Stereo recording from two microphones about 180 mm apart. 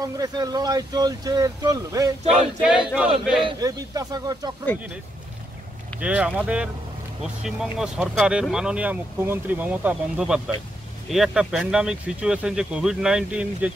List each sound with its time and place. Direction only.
0.0 s speech: 20° right (ahead or behind)
2.2 s speech: 5° right (ahead or behind)
3.4 s speech: 20° right (ahead or behind)
5.9 s speech: 5° right (ahead or behind)